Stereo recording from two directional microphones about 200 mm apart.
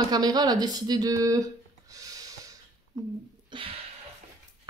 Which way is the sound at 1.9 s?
15° right (ahead or behind).